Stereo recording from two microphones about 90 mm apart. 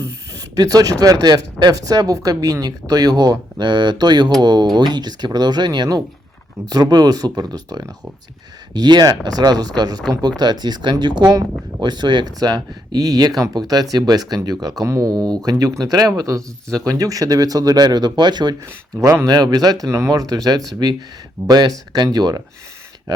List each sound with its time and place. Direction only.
0.0 s speech: 40° right (ahead or behind)